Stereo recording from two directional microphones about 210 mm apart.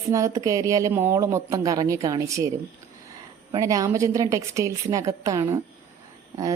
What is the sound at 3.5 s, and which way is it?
A woman's voice, 15° right (ahead or behind).